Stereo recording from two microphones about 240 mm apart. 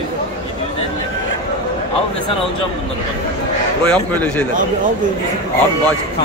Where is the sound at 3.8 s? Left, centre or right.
Centre.